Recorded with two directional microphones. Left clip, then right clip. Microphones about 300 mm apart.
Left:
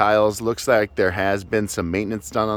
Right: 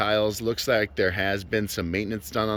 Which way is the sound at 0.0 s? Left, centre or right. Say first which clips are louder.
Left 6 dB; centre.